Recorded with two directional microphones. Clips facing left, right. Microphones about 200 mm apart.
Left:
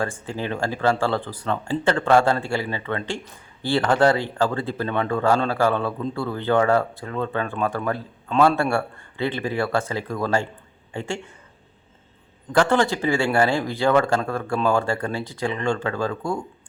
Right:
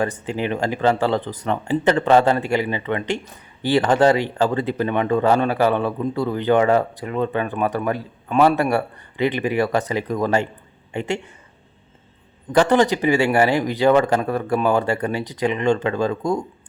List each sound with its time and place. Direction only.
0.3 s speech: 20° right (ahead or behind)
12.5 s speech: 15° right (ahead or behind)